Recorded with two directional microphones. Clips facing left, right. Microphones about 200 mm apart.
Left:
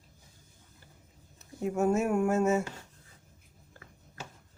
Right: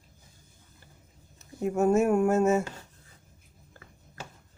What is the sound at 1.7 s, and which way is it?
Speech, 45° right (ahead or behind).